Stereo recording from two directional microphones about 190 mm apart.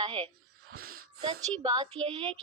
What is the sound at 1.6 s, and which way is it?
Speech, 25° right (ahead or behind).